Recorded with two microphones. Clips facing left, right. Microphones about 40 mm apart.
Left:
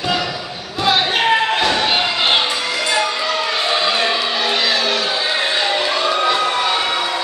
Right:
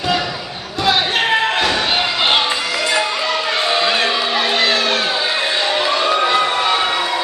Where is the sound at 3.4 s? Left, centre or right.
Centre.